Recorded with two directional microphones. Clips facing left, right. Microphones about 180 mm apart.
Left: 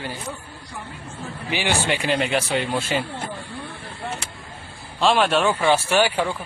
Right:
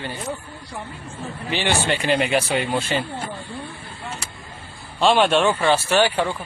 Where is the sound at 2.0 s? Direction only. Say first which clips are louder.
Right 2 dB; 5° right (ahead or behind).